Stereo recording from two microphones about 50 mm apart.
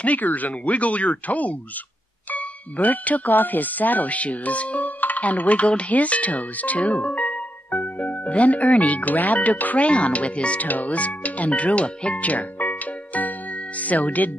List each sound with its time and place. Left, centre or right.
0.0 s speech: left